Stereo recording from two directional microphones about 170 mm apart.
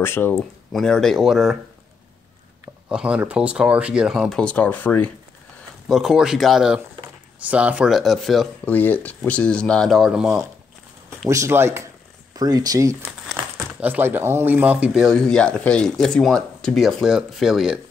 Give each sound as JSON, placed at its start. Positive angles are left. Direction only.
{"t": 0.0, "sound": "speech", "side_deg": 15}
{"t": 0.4, "sound": "speech", "side_deg": 5}
{"t": 2.6, "sound": "speech", "side_deg": -5}
{"t": 5.9, "sound": "speech", "side_deg": 0}
{"t": 11.1, "sound": "speech", "side_deg": -15}
{"t": 13.3, "sound": "speech", "side_deg": -10}